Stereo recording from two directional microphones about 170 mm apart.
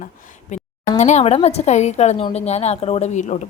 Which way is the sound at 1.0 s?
40° left (ahead or behind).